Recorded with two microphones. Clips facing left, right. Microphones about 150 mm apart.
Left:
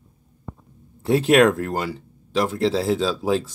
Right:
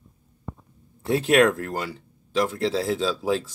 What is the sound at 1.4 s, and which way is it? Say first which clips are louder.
Speech: left 4 dB; 30° left (ahead or behind).